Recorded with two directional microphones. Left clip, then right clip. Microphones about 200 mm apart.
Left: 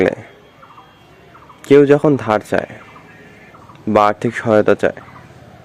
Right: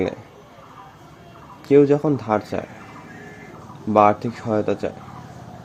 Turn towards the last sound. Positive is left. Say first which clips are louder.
# left 10 dB
turn(degrees=15)  # may be behind; listen again after turning